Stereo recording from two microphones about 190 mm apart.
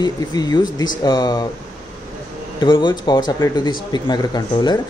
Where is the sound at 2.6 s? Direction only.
25° left (ahead or behind).